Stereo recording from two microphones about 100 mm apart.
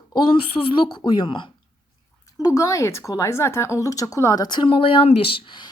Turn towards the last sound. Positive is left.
turn(degrees=55)  # may be behind; listen again after turning